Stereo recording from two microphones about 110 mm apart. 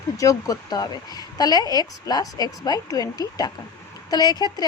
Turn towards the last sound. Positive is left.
turn(degrees=35)  # may be behind; listen again after turning